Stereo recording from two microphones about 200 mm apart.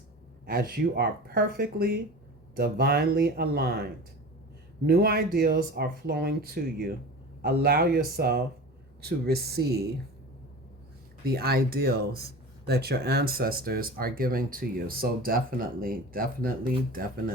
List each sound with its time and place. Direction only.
0.4 s speech: 50° right (ahead or behind)
4.9 s speech: 50° right (ahead or behind)
11.3 s speech: 50° right (ahead or behind)